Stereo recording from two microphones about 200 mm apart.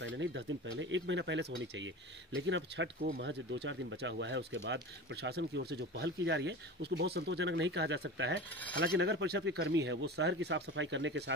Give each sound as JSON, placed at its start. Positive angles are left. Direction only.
{"t": 0.0, "sound": "speech", "side_deg": -65}